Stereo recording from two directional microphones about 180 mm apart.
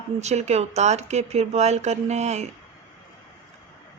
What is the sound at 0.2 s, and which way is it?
Speech, 40° right (ahead or behind).